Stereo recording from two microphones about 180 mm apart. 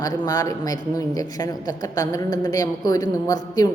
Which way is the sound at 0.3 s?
20° left (ahead or behind).